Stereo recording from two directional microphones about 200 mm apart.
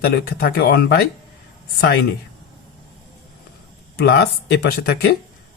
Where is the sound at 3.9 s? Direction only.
55° left (ahead or behind).